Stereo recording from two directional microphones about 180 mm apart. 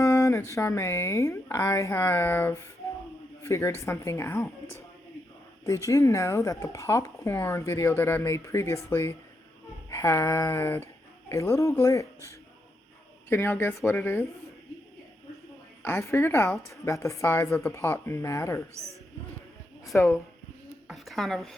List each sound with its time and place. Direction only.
0.0 s speech: 15° left (ahead or behind)
5.6 s speech: 15° left (ahead or behind)
15.8 s speech: 15° left (ahead or behind)
20.0 s speech: 15° left (ahead or behind)
20.8 s a sound: centre (ahead or behind)